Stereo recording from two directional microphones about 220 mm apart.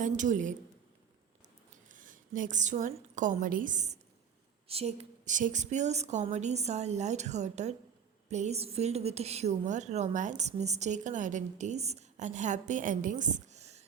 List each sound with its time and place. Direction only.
0.0 s a woman's voice: 35° right (ahead or behind)
1.7 s a woman's voice: 35° right (ahead or behind)